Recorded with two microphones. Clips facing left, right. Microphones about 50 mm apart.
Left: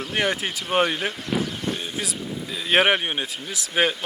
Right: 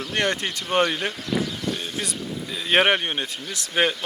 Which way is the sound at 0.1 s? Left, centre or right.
Centre.